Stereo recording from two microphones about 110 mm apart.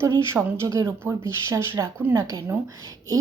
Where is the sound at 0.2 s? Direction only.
25° right (ahead or behind).